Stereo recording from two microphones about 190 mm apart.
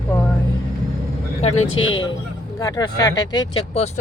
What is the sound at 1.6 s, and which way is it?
Speech, 90° left.